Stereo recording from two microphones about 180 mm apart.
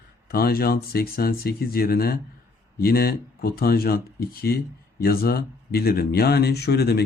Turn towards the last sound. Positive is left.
turn(degrees=65)  # may be behind; listen again after turning